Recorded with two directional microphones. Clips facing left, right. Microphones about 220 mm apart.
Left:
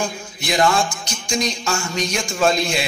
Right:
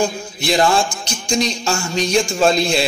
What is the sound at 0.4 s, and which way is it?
A man's voice, 30° right (ahead or behind).